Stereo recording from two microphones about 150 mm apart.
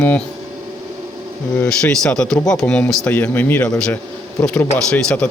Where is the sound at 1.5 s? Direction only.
5° left (ahead or behind).